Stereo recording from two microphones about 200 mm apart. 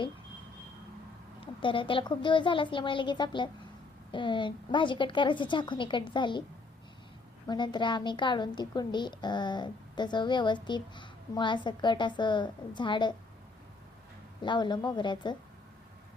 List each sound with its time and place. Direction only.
1.4 s a woman's voice: 25° left (ahead or behind)
7.4 s a woman's voice: 20° left (ahead or behind)
14.4 s a woman's voice: 20° left (ahead or behind)